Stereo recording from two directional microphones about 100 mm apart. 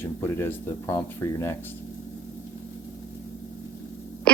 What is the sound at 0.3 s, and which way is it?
Speech, 25° left (ahead or behind).